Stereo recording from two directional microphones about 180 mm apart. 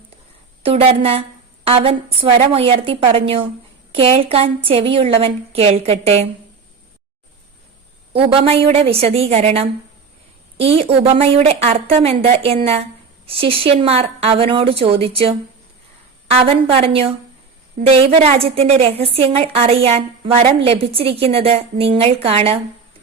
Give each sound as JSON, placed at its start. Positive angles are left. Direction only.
{"t": 0.6, "sound": "a woman's voice", "side_deg": -30}
{"t": 8.1, "sound": "a woman's voice", "side_deg": -30}